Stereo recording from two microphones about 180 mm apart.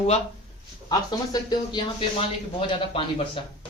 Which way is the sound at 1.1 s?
20° left (ahead or behind).